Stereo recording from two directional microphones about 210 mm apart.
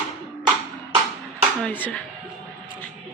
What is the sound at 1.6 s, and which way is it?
Speech, 5° left (ahead or behind).